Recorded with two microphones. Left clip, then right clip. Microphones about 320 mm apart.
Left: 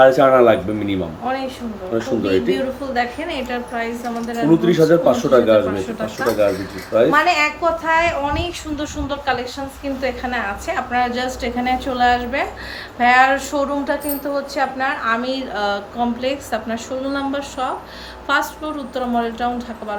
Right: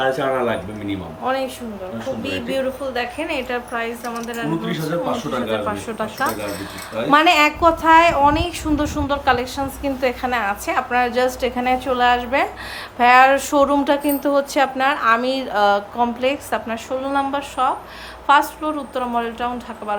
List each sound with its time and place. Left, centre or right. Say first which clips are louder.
0.0 s a man's voice: left 9 dB; centre
1.2 s a sound: right 2 dB; centre
2.2 s speech: left 2 dB; centre
4.6 s a man's voice: left 10 dB; centre
7.1 s speech: right 2 dB; right